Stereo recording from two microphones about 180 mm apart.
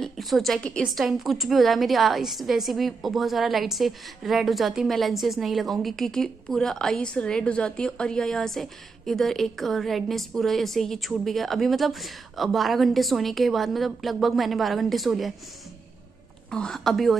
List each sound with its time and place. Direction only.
0.0 s a woman's voice: centre (ahead or behind)
16.4 s a woman's voice: 5° left (ahead or behind)